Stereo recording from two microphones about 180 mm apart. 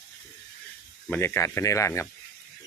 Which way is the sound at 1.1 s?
15° left (ahead or behind).